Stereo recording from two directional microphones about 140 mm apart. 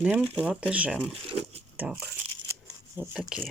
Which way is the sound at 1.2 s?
45° right (ahead or behind).